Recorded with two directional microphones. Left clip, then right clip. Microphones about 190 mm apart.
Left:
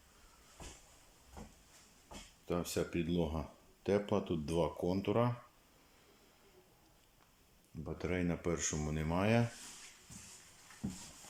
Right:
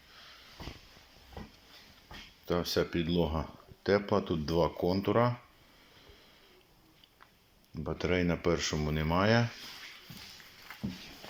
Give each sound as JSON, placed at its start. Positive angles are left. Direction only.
{"t": 2.5, "sound": "speech", "side_deg": 10}
{"t": 3.8, "sound": "speech", "side_deg": 10}
{"t": 7.9, "sound": "speech", "side_deg": 5}
{"t": 10.7, "sound": "a sound", "side_deg": -50}